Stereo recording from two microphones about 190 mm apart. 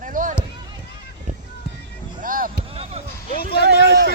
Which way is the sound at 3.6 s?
65° right (ahead or behind).